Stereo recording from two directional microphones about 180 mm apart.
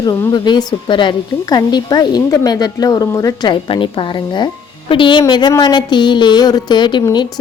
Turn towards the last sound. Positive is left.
turn(degrees=25)  # may be behind; listen again after turning